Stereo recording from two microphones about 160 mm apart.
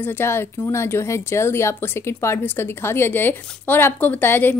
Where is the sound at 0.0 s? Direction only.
15° left (ahead or behind).